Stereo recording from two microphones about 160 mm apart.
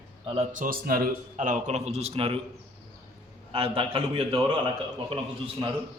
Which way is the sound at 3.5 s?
35° right (ahead or behind).